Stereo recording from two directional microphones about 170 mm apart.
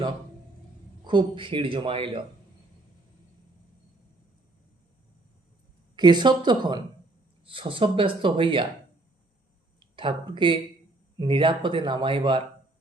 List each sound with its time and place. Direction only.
1.0 s a man's voice: 30° right (ahead or behind)
6.0 s a man's voice: 25° right (ahead or behind)
9.8 s a man's voice: 30° right (ahead or behind)